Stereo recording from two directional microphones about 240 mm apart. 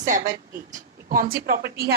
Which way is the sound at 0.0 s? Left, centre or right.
Right.